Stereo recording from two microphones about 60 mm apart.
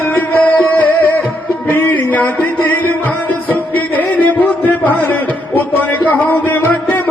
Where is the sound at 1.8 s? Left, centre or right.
Left.